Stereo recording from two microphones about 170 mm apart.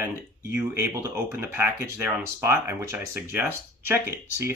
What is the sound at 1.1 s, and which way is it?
Speech, 10° right (ahead or behind).